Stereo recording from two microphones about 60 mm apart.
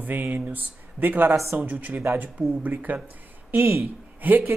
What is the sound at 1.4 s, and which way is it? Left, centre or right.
Speech, right.